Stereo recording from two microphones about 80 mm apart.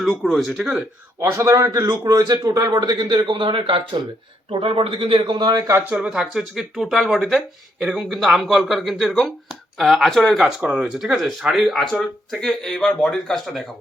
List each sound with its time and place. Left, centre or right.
0.0 s speech: centre
1.2 s a man's voice: right
5.8 s speech: centre
10.6 s speech: centre